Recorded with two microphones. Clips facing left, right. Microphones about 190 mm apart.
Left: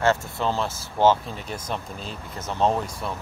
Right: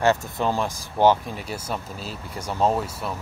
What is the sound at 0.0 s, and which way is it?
Speech, 15° right (ahead or behind).